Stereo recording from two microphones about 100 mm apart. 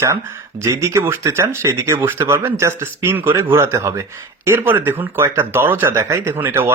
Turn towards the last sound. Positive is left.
turn(degrees=-20)  # may be behind; listen again after turning